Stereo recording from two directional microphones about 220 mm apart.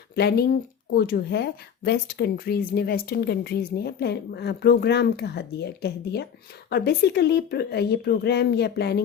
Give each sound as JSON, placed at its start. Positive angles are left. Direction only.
{"t": 0.2, "sound": "speech", "side_deg": 45}